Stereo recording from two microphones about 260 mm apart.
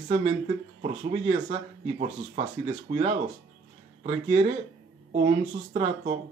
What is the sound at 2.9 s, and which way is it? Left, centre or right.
Speech, right.